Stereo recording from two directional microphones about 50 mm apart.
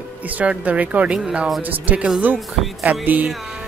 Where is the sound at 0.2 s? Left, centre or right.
Right.